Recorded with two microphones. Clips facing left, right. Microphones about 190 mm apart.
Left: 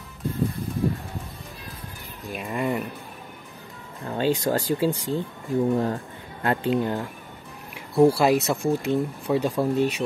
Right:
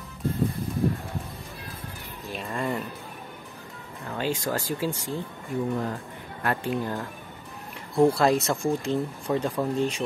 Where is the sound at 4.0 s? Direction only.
30° left (ahead or behind).